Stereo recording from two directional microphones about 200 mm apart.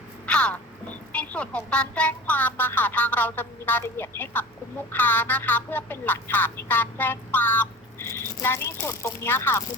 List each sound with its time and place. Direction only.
0.3 s speech: 5° left (ahead or behind)